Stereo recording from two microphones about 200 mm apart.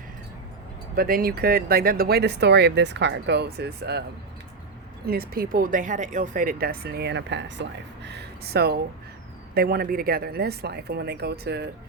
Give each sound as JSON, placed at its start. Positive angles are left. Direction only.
{"t": 0.9, "sound": "speech", "side_deg": -45}
{"t": 5.0, "sound": "speech", "side_deg": -50}